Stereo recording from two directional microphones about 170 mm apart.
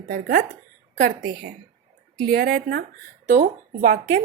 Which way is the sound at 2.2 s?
70° right (ahead or behind).